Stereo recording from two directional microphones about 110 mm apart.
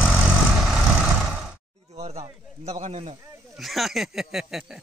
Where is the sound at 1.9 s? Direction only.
70° right (ahead or behind).